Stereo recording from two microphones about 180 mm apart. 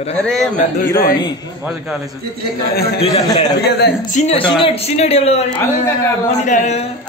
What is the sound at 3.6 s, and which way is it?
Speech, 65° left (ahead or behind).